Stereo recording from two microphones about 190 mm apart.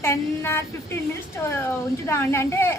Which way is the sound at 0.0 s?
15° left (ahead or behind).